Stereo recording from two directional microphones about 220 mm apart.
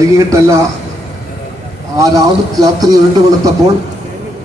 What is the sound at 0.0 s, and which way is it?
Speech, 15° right (ahead or behind).